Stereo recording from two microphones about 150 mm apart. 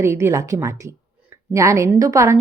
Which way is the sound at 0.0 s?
20° right (ahead or behind).